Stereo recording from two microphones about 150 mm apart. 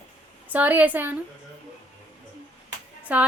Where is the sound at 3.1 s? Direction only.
10° right (ahead or behind).